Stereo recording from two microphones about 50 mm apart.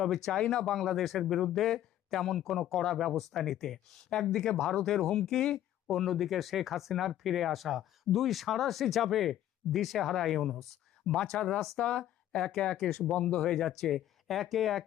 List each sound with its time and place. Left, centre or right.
0.0 s speech: centre
5.9 s speech: centre
13.1 s speech: centre